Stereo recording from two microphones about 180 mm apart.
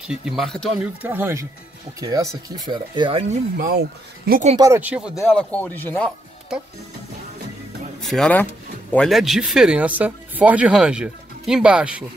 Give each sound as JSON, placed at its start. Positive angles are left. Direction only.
{"t": 0.1, "sound": "speech", "side_deg": 0}
{"t": 1.0, "sound": "speech", "side_deg": -10}
{"t": 3.5, "sound": "speech", "side_deg": -55}
{"t": 4.3, "sound": "speech", "side_deg": -40}
{"t": 4.6, "sound": "speech", "side_deg": -15}
{"t": 5.2, "sound": "speech", "side_deg": 5}
{"t": 8.0, "sound": "speech", "side_deg": 0}